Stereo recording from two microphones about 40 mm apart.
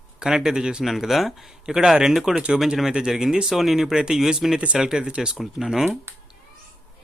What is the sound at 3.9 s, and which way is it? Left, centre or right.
Speech, centre.